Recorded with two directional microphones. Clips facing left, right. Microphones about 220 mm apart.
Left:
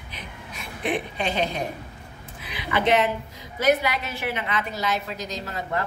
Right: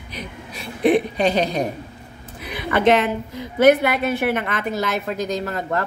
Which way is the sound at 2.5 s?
50° right (ahead or behind).